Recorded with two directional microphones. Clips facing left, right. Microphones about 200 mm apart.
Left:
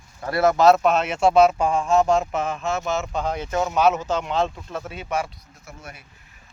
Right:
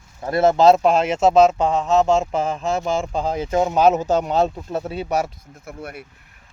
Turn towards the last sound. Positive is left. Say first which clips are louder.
# right 8 dB
turn(degrees=-60)  # may be behind; listen again after turning